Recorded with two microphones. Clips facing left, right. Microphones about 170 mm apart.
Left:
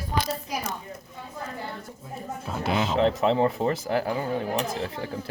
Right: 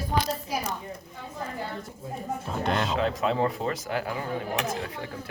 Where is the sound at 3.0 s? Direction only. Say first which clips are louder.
Left 7 dB; 25° left (ahead or behind).